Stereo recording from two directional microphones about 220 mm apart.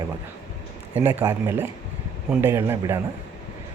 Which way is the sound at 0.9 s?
10° right (ahead or behind).